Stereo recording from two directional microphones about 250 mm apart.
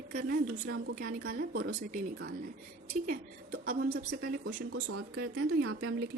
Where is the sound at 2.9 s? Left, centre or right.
Right.